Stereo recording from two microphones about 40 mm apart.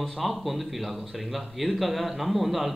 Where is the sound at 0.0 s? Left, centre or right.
Centre.